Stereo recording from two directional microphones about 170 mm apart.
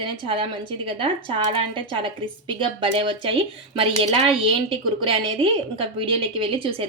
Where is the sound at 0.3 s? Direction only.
30° right (ahead or behind).